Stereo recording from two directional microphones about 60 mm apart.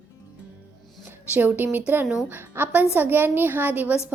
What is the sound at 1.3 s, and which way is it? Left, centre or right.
A child's voice, right.